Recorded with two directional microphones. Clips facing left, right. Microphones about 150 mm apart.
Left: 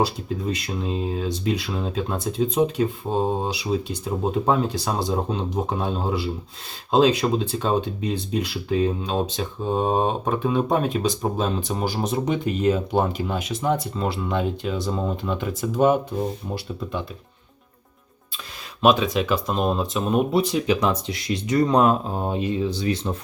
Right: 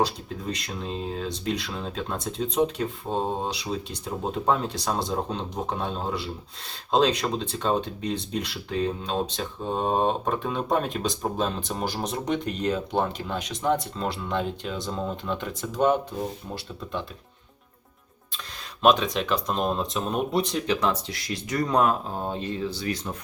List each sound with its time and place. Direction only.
0.0 s speech: 5° left (ahead or behind)
18.8 s speech: 5° left (ahead or behind)
20.7 s speech: 15° left (ahead or behind)